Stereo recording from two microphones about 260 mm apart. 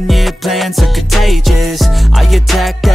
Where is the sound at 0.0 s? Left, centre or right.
Centre.